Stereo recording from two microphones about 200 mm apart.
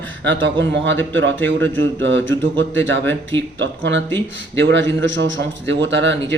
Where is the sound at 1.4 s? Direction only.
10° left (ahead or behind).